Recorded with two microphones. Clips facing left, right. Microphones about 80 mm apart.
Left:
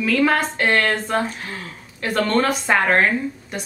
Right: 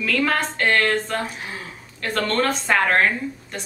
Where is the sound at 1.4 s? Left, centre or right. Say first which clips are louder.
Left 1 dB; centre.